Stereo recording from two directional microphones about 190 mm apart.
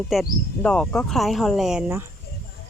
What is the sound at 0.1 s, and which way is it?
Speech, centre (ahead or behind).